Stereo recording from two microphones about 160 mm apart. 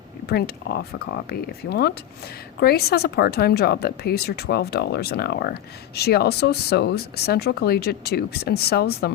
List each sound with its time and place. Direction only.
0.3 s a woman's voice: 75° left (ahead or behind)